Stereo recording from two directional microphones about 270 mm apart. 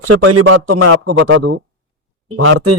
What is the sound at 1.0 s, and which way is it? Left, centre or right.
Speech, right.